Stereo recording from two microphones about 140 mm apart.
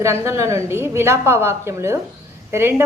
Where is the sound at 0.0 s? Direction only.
20° right (ahead or behind).